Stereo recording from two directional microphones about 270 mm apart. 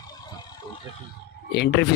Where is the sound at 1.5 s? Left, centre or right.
Left.